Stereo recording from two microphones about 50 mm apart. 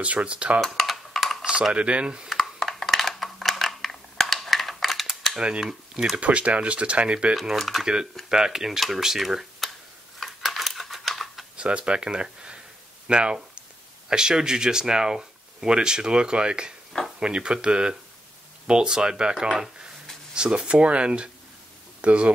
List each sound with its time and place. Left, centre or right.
0.0 s speech: right
0.6 s computer keyboard: centre
1.4 s speech: centre
2.4 s a sound: centre
5.0 s cap gun: centre
5.4 s speech: centre
6.1 s speech: right
7.4 s speech: centre
7.8 s speech: centre
10.2 s a sound: centre
11.5 s speech: right